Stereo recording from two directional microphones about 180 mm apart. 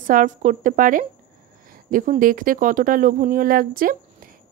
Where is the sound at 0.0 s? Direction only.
45° right (ahead or behind).